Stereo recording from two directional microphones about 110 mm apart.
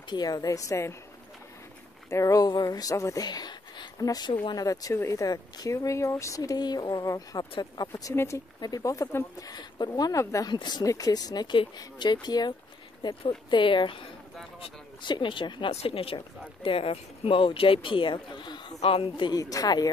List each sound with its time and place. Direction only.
0.1 s speech: 35° left (ahead or behind)
2.0 s speech: 30° left (ahead or behind); by 4.6 s 45° left (ahead or behind)
4.9 s speech: 25° left (ahead or behind)
7.9 s speech: 25° left (ahead or behind)
8.5 s speech: 35° left (ahead or behind)
9.6 s speech: 40° left (ahead or behind)
15.0 s speech: 45° left (ahead or behind)
15.7 s speech: 65° left (ahead or behind); by 18.6 s 45° left (ahead or behind)
18.8 s speech: 60° left (ahead or behind)
19.3 s speech: 35° left (ahead or behind)